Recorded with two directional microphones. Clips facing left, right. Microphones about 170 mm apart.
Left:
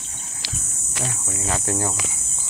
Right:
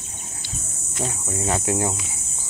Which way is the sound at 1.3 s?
25° right (ahead or behind).